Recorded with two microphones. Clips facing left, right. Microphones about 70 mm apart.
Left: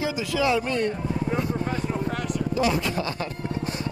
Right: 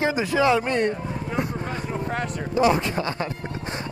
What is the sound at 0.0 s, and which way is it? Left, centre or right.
Speech, right.